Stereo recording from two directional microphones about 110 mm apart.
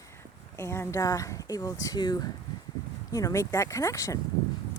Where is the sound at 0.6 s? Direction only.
25° left (ahead or behind).